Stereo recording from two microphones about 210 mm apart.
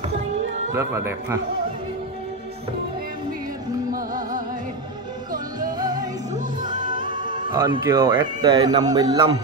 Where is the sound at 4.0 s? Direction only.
40° right (ahead or behind).